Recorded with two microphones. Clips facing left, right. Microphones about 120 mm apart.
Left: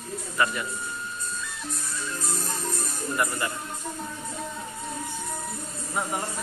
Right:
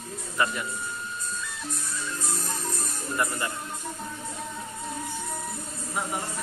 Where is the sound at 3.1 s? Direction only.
15° left (ahead or behind).